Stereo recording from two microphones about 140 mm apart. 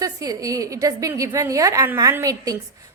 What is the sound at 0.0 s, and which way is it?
A woman's voice, 25° right (ahead or behind).